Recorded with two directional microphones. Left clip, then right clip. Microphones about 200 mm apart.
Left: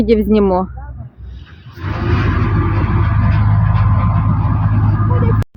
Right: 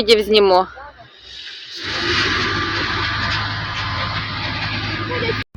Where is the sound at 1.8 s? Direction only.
40° left (ahead or behind).